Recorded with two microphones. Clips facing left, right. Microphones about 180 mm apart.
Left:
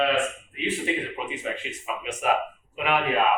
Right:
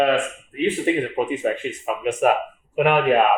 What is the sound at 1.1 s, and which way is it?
Speech, 50° right (ahead or behind).